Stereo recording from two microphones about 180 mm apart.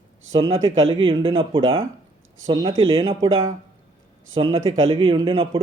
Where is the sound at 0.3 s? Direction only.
25° right (ahead or behind).